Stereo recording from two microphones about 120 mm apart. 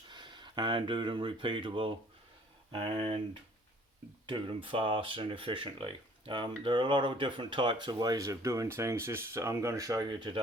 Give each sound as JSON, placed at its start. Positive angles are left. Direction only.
{"t": 0.1, "sound": "speech", "side_deg": -40}
{"t": 4.3, "sound": "speech", "side_deg": -45}